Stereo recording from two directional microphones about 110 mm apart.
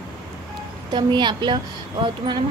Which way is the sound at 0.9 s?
45° right (ahead or behind).